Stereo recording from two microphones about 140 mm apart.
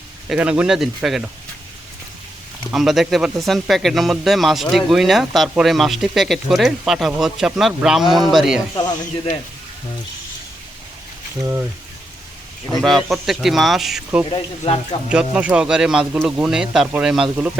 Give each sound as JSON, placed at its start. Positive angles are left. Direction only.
{"t": 0.3, "sound": "speech", "side_deg": -10}
{"t": 2.7, "sound": "speech", "side_deg": 0}
{"t": 8.7, "sound": "speech", "side_deg": 30}
{"t": 12.8, "sound": "speech", "side_deg": 0}
{"t": 14.3, "sound": "speech", "side_deg": 40}
{"t": 15.1, "sound": "speech", "side_deg": -10}